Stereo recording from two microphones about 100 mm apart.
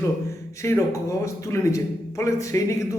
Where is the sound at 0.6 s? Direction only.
25° left (ahead or behind).